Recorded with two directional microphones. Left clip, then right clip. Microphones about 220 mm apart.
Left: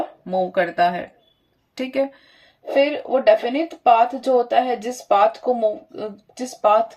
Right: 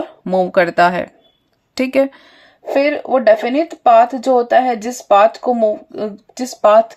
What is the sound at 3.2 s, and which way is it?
Speech, 45° right (ahead or behind).